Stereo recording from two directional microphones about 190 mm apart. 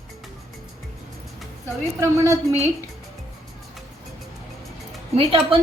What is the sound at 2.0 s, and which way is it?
Speech, 15° right (ahead or behind).